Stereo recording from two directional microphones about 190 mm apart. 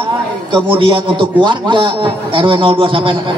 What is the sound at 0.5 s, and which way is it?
A man's voice, 25° right (ahead or behind).